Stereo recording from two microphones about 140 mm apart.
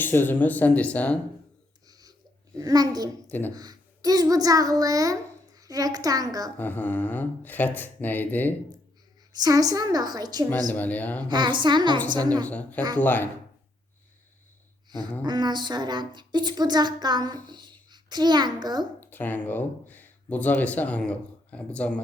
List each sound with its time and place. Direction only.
0.0 s speech: 15° left (ahead or behind)
1.9 s a sound: 25° right (ahead or behind)
2.6 s a child's voice: 25° right (ahead or behind)
3.2 s speech: 15° left (ahead or behind)
3.5 s a child's voice: 25° right (ahead or behind)
6.6 s speech: 15° left (ahead or behind)
9.3 s a child's voice: 25° right (ahead or behind)
10.7 s speech: 10° left (ahead or behind)
11.3 s a woman's voice: 35° right (ahead or behind)
12.4 s speech: 10° left (ahead or behind)
15.2 s a woman's voice: 30° right (ahead or behind)
18.9 s speech: 15° left (ahead or behind)